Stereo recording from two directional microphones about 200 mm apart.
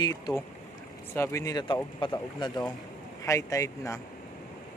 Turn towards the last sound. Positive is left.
turn(degrees=15)  # may be behind; listen again after turning